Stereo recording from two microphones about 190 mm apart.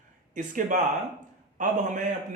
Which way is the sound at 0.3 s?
45° right (ahead or behind).